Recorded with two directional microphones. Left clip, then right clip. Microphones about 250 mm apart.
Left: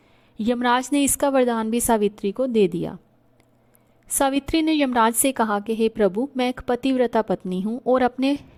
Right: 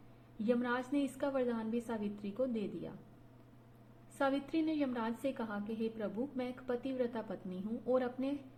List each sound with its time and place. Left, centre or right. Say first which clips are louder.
0.3 s a woman's voice: left 15 dB; left
4.2 s a woman's voice: left 14 dB; left